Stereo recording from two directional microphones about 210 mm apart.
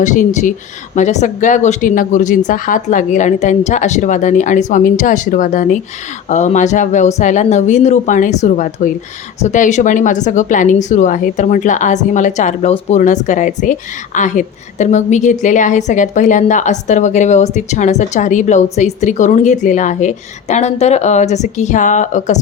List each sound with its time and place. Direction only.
0.0 s a woman's voice: 35° left (ahead or behind)